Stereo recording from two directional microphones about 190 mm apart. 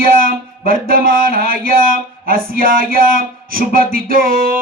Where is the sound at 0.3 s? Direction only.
50° right (ahead or behind).